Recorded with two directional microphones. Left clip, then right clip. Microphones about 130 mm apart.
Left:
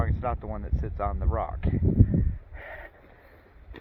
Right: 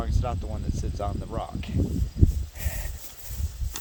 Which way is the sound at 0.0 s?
10° right (ahead or behind).